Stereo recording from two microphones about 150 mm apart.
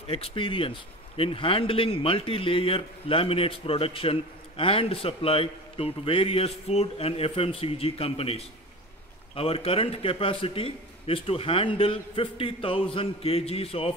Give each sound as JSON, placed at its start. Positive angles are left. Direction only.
{"t": 0.1, "sound": "speech", "side_deg": 35}